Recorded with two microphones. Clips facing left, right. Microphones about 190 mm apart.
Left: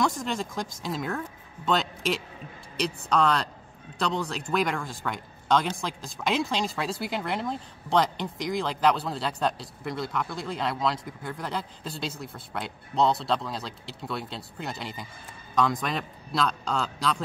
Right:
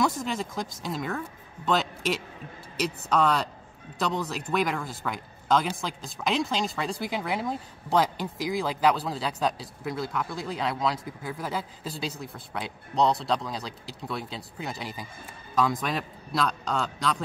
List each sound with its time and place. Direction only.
0.0 s speech: 5° right (ahead or behind)